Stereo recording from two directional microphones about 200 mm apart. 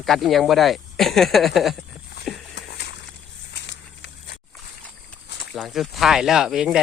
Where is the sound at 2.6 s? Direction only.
55° left (ahead or behind).